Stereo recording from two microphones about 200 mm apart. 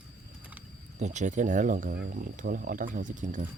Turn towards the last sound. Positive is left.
turn(degrees=-40)  # may be behind; listen again after turning